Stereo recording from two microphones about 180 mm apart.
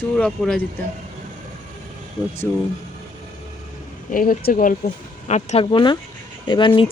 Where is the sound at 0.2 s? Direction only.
5° left (ahead or behind).